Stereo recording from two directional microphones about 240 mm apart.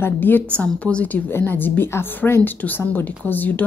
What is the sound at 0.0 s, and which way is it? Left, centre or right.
A woman's voice, centre.